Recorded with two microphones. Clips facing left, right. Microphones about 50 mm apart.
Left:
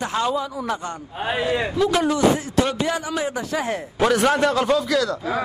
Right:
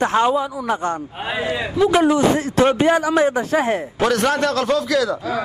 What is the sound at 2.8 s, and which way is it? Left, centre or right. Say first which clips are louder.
Speech: right 8 dB; right.